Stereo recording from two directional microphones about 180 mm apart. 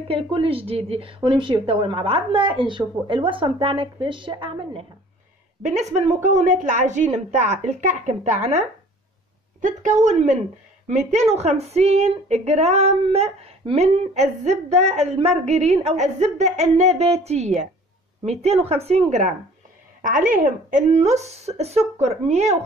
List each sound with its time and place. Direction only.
0.1 s a woman's voice: 30° right (ahead or behind)
5.6 s a woman's voice: 40° right (ahead or behind)